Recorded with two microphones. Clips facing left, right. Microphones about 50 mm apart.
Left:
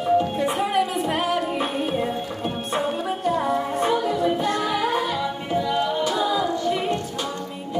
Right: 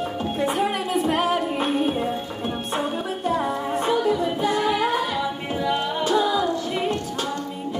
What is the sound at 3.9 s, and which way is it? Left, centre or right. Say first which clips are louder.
Music: right 1 dB; centre.